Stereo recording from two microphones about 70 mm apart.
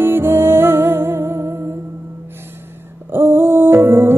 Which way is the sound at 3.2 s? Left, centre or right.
Right.